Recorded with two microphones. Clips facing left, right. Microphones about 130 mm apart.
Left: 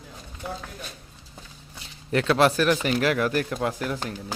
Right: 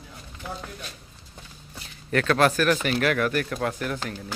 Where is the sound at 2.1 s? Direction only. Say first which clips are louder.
Left 1 dB; 20° left (ahead or behind).